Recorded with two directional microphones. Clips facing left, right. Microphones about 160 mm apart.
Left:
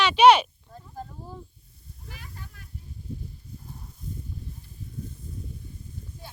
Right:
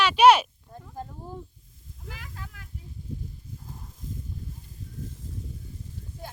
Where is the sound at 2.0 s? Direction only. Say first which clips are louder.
Right 3 dB; 90° right.